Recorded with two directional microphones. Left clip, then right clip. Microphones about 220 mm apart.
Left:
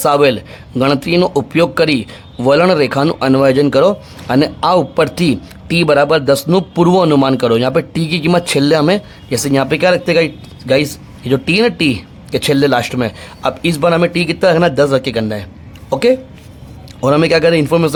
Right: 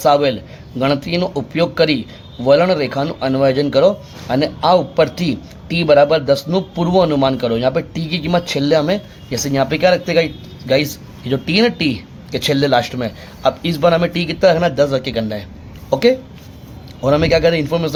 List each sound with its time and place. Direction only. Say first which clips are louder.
0.0 s a man's voice: left 2 dB; 25° left (ahead or behind)